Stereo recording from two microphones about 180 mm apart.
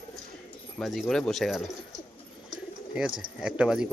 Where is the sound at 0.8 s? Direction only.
Centre (ahead or behind).